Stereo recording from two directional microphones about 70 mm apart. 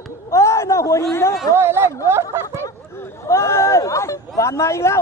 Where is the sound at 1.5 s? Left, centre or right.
Right.